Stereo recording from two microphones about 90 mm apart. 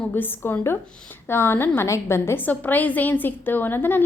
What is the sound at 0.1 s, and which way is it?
A woman's voice, 25° left (ahead or behind).